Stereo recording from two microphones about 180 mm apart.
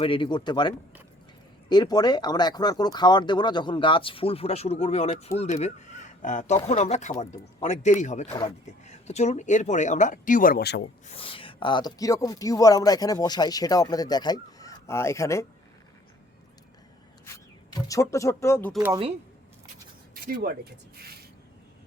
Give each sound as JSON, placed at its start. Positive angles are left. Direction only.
{"t": 0.0, "sound": "speech", "side_deg": 30}
{"t": 1.7, "sound": "speech", "side_deg": 25}
{"t": 11.0, "sound": "speech", "side_deg": 30}
{"t": 17.2, "sound": "speech", "side_deg": 20}
{"t": 20.1, "sound": "speech", "side_deg": -50}